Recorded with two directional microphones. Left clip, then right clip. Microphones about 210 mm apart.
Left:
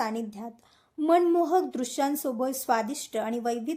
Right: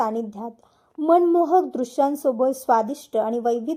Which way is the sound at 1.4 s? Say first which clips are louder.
Right 6 dB; 35° left (ahead or behind).